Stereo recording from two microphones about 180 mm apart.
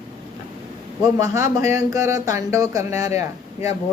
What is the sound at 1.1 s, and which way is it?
Speech, 15° right (ahead or behind).